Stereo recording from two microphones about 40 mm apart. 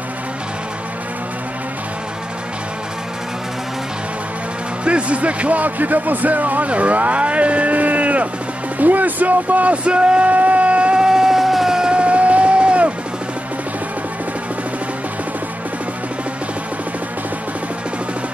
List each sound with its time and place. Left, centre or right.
4.8 s speech: right
11.1 s vehicle: centre
11.9 s music: right